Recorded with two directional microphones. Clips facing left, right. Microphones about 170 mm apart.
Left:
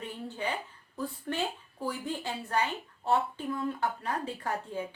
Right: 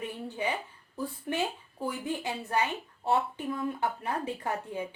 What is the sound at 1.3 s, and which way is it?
Speech, 15° right (ahead or behind).